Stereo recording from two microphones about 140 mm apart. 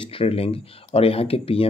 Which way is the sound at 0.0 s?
40° left (ahead or behind).